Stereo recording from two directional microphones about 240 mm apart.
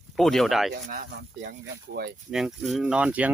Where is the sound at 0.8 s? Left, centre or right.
Right.